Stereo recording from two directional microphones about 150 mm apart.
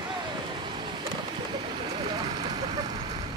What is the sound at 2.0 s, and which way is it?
Vehicle, 30° right (ahead or behind).